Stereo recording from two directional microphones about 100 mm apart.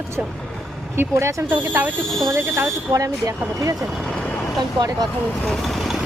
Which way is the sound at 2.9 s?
35° right (ahead or behind).